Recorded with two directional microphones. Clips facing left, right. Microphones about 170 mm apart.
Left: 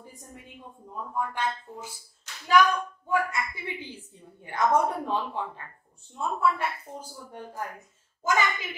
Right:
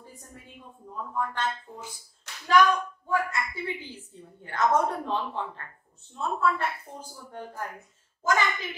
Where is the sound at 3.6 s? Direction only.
15° left (ahead or behind).